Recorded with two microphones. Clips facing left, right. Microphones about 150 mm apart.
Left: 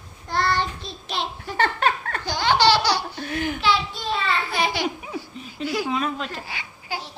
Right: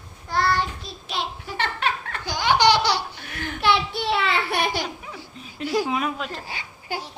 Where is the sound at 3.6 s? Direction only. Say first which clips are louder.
Right 5 dB; 65° right (ahead or behind).